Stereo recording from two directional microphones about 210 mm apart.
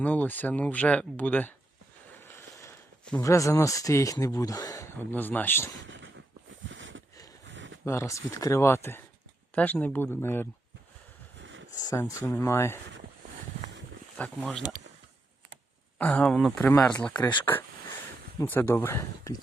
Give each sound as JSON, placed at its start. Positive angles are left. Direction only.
{"t": 0.0, "sound": "speech", "side_deg": 10}
{"t": 5.8, "sound": "a sound", "side_deg": -60}
{"t": 7.9, "sound": "speech", "side_deg": 15}
{"t": 11.8, "sound": "speech", "side_deg": 15}
{"t": 14.2, "sound": "speech", "side_deg": 5}
{"t": 16.0, "sound": "speech", "side_deg": 5}
{"t": 18.3, "sound": "speech", "side_deg": 10}